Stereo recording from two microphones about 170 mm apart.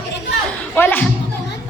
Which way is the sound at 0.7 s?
10° left (ahead or behind).